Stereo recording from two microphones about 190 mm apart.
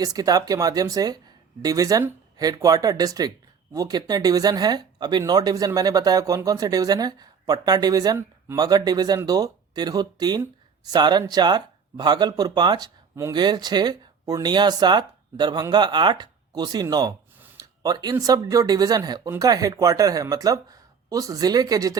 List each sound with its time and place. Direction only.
0.0 s speech: 20° right (ahead or behind)